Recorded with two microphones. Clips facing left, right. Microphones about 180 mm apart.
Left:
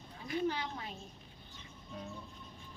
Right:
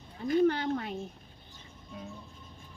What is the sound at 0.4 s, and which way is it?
Speech, 60° right (ahead or behind).